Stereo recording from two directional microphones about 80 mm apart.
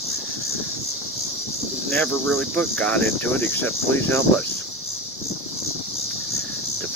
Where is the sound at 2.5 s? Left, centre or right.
Centre.